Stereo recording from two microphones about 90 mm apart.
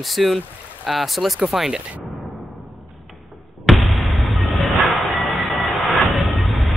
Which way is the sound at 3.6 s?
Centre (ahead or behind).